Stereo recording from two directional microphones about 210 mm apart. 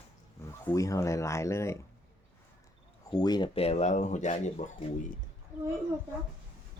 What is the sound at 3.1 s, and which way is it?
Speech, 20° left (ahead or behind).